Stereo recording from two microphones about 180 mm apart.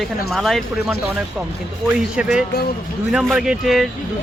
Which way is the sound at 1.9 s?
5° right (ahead or behind).